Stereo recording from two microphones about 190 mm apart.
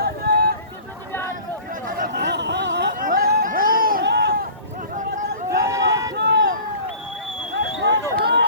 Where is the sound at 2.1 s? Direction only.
65° right (ahead or behind).